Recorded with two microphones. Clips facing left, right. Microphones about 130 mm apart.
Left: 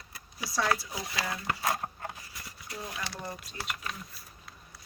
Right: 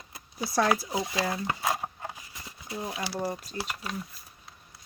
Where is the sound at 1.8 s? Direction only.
15° right (ahead or behind).